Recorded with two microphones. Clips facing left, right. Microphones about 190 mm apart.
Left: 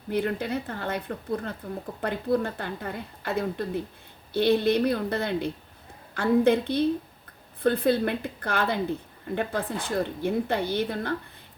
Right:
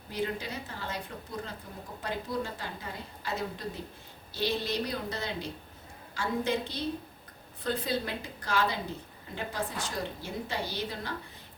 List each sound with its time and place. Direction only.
0.1 s a woman's voice: 55° left (ahead or behind)